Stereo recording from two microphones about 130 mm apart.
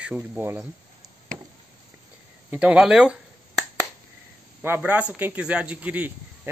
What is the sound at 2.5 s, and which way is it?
Speech, 10° right (ahead or behind).